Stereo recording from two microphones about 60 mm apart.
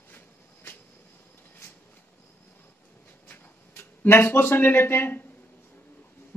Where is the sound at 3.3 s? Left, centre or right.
Left.